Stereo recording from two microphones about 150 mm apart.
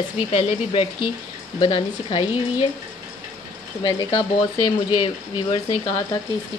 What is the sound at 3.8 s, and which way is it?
A woman's voice, 30° left (ahead or behind).